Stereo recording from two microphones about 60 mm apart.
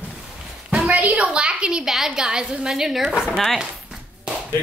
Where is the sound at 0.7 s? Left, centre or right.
Right.